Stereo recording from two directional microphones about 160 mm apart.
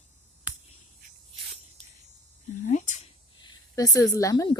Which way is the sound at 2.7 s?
50° left (ahead or behind).